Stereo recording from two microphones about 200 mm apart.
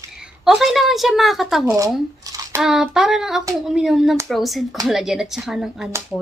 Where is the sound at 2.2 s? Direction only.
15° right (ahead or behind).